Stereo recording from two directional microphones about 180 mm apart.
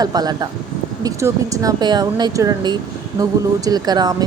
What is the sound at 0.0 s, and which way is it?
Speech, 20° right (ahead or behind).